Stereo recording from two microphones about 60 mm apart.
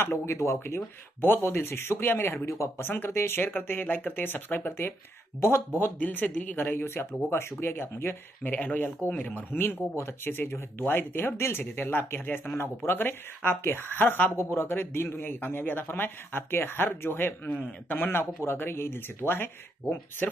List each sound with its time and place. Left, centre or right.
0.0 s speech: left
5.9 s speech: left
14.3 s speech: left